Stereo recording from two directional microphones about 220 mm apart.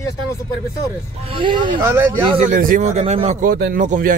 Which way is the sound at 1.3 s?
20° right (ahead or behind).